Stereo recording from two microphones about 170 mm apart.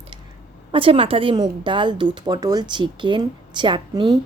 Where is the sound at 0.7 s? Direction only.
30° right (ahead or behind).